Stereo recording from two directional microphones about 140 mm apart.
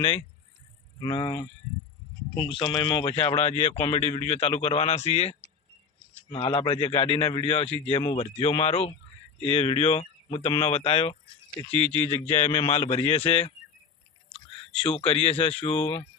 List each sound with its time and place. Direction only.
1.0 s speech: 25° left (ahead or behind)
2.3 s a man's voice: 35° left (ahead or behind)
12.3 s speech: 45° left (ahead or behind)